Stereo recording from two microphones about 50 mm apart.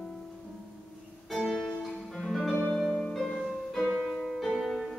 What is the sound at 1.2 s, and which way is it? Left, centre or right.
Music, centre.